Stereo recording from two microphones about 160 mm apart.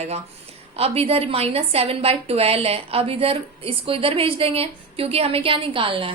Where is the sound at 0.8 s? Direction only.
40° right (ahead or behind).